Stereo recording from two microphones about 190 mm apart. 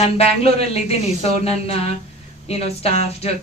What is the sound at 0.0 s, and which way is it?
Speech, 35° left (ahead or behind).